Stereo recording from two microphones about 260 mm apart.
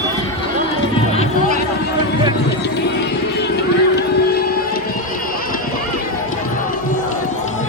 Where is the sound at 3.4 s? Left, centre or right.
Left.